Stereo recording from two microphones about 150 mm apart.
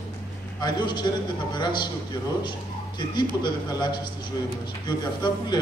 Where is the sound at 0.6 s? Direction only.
30° left (ahead or behind).